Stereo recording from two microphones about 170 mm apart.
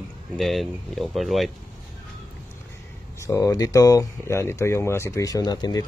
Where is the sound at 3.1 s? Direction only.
15° left (ahead or behind).